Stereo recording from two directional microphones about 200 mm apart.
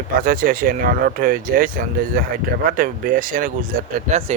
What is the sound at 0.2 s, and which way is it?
Speech, 45° right (ahead or behind).